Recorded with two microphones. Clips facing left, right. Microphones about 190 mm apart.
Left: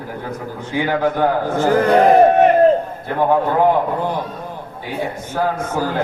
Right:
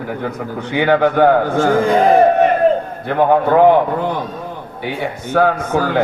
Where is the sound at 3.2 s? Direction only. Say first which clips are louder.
Right 4 dB; 70° right (ahead or behind).